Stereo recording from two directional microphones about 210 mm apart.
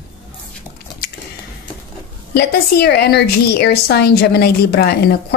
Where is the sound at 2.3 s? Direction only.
50° left (ahead or behind).